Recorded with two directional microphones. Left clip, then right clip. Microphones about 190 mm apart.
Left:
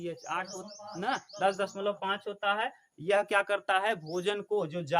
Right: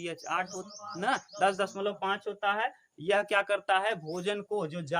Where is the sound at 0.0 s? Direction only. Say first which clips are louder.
Right 2 dB; 25° right (ahead or behind).